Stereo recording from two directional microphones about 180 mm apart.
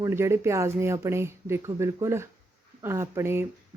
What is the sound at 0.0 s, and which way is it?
Speech, 15° right (ahead or behind).